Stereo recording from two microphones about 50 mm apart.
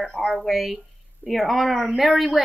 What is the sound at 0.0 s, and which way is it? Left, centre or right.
Speech, centre.